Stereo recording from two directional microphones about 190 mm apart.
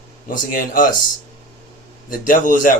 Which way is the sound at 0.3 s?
45° left (ahead or behind).